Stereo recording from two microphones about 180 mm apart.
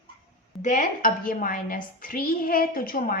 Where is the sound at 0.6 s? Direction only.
45° left (ahead or behind).